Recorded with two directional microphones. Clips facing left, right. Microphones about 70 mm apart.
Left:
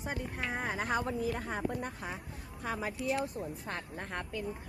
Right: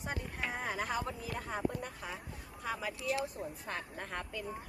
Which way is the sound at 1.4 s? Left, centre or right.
Left.